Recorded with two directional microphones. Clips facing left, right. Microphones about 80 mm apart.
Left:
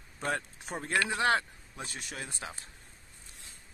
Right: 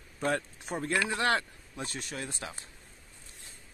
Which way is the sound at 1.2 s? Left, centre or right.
Centre.